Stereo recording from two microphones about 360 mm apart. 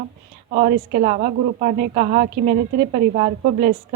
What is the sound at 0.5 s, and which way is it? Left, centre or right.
A woman's voice, centre.